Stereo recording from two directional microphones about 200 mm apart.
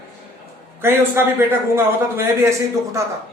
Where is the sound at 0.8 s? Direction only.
10° right (ahead or behind).